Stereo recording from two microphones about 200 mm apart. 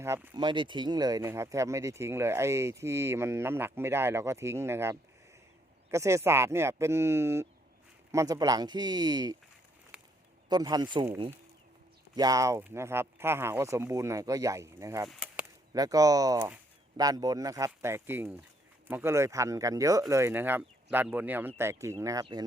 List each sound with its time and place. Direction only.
0.0 s speech: 15° right (ahead or behind)
9.9 s a sound: 5° right (ahead or behind)
10.5 s speech: 20° right (ahead or behind)
12.1 s speech: 20° right (ahead or behind)
15.1 s chop: 5° right (ahead or behind)
15.7 s speech: 20° right (ahead or behind)